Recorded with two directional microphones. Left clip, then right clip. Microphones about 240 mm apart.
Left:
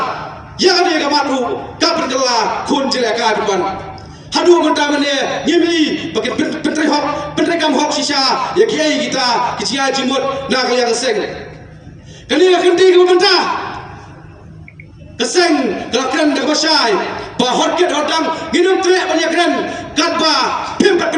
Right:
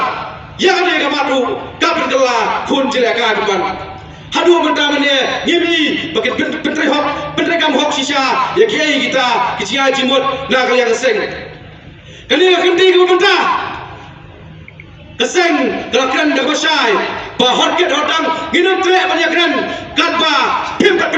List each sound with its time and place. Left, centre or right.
0.5 s a man's voice: left
12.3 s a man's voice: left
15.2 s a man's voice: left